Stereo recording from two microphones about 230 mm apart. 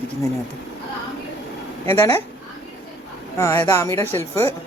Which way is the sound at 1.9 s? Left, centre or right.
Centre.